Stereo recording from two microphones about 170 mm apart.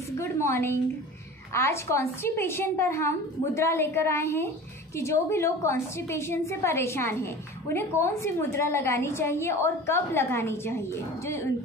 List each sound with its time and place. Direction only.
0.2 s a woman's voice: 15° left (ahead or behind)